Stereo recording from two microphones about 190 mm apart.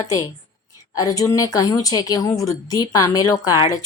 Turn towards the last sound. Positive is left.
turn(degrees=20)  # may be behind; listen again after turning